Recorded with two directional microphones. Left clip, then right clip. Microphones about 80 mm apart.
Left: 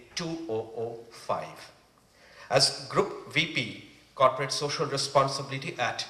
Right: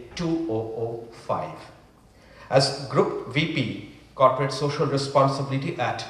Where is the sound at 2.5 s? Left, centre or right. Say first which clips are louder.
Right 3 dB; left.